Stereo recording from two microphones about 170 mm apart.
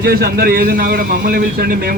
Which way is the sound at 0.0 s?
60° right (ahead or behind).